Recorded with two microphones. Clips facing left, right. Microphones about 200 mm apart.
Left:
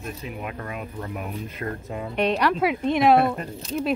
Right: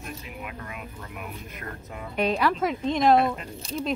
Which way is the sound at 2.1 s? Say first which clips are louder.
Left 2 dB; centre (ahead or behind).